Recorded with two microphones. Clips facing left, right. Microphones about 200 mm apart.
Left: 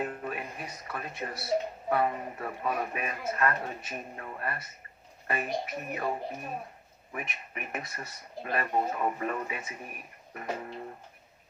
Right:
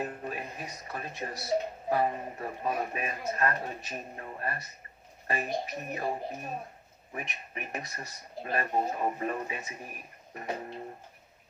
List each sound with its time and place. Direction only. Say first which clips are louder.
0.0 s speech: left 1 dB; 30° right (ahead or behind)